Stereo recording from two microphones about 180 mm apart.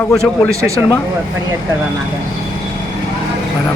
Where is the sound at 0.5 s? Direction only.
15° right (ahead or behind).